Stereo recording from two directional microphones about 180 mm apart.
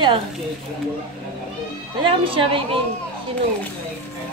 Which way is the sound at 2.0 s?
30° right (ahead or behind).